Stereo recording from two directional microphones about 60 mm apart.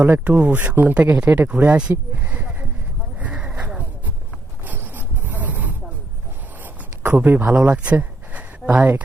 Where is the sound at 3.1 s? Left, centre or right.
Right.